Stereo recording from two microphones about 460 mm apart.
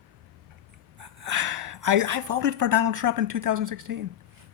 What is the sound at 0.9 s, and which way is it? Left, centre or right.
Speech, right.